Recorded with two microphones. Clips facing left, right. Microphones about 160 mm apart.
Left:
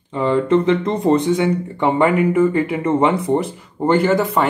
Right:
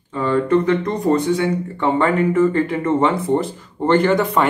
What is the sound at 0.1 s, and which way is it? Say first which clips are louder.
Speech: left 1 dB; 20° left (ahead or behind).